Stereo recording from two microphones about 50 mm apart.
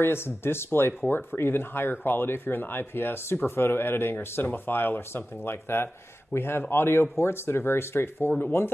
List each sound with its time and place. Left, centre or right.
0.0 s speech: left